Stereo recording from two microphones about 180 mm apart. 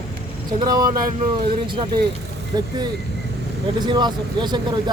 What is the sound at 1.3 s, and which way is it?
Speech, 25° right (ahead or behind).